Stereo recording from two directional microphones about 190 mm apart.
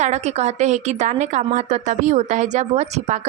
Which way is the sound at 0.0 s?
35° right (ahead or behind).